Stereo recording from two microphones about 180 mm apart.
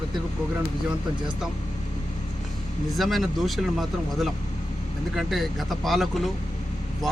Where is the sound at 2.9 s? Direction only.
Centre (ahead or behind).